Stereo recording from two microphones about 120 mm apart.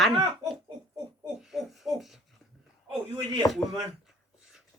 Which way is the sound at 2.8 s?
40° right (ahead or behind).